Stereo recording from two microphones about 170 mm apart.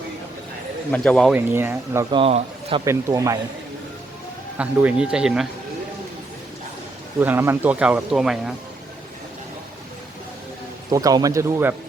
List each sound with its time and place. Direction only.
0.9 s speech: 5° left (ahead or behind)
1.4 s speech: 15° right (ahead or behind)
2.0 s speech: 30° right (ahead or behind)
2.8 s speech: 15° right (ahead or behind)
4.5 s speech: 10° right (ahead or behind)
7.2 s speech: 15° right (ahead or behind)
10.8 s speech: 20° right (ahead or behind)